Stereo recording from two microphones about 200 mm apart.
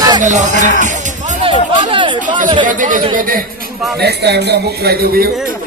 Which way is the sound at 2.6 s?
40° right (ahead or behind).